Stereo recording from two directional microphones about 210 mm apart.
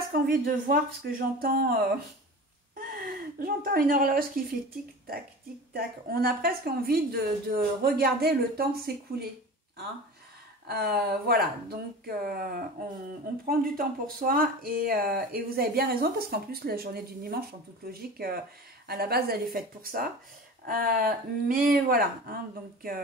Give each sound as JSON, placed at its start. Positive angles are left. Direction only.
{"t": 0.3, "sound": "speech", "side_deg": -45}
{"t": 2.7, "sound": "a sound", "side_deg": -40}
{"t": 5.7, "sound": "speech", "side_deg": -45}
{"t": 10.7, "sound": "speech", "side_deg": -45}